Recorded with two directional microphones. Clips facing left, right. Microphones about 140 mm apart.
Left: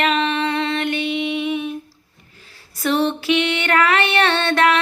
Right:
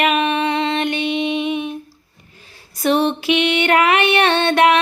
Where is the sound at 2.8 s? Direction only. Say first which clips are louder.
Right 2 dB; 15° right (ahead or behind).